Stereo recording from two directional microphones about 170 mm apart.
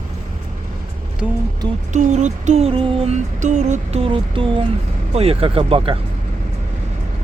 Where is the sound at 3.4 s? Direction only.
45° right (ahead or behind).